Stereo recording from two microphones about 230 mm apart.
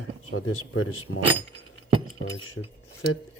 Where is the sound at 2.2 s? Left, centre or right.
Left.